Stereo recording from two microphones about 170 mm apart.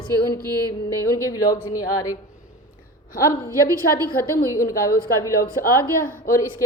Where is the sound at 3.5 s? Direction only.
20° right (ahead or behind).